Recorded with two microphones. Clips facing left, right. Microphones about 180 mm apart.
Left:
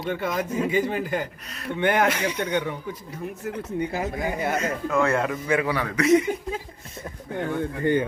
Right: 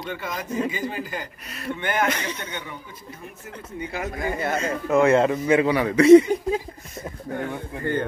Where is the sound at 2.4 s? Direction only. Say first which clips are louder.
Left 10 dB; 65° left (ahead or behind).